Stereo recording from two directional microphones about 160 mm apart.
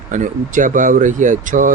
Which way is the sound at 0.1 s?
55° right (ahead or behind).